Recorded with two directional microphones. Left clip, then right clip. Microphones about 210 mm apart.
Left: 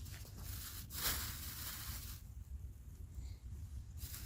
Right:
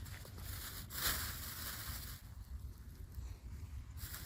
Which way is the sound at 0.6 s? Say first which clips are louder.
Right 2 dB; 15° left (ahead or behind).